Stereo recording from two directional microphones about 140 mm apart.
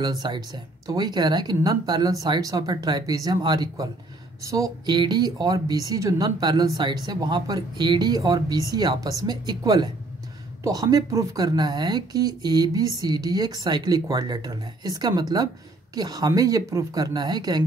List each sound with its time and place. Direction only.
0.0 s speech: 30° right (ahead or behind)